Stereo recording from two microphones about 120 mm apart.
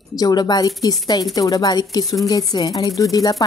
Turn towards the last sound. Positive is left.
turn(degrees=30)  # may be behind; listen again after turning